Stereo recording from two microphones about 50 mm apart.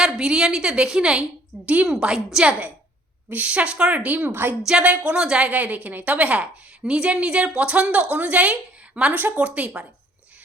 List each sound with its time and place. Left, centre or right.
0.0 s a woman's voice: centre
1.6 s a woman's voice: right
1.9 s a woman's voice: centre
2.4 s a woman's voice: right
5.2 s a woman's voice: centre
5.5 s a woman's voice: right
9.4 s a woman's voice: right